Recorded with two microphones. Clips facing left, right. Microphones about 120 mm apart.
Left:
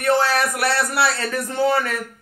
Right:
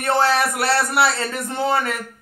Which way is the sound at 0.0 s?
25° right (ahead or behind).